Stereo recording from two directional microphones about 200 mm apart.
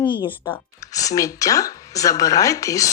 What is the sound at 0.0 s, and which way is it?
A woman's voice, 25° left (ahead or behind).